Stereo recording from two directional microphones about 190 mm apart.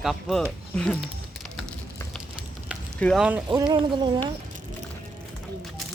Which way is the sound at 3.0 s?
Centre (ahead or behind).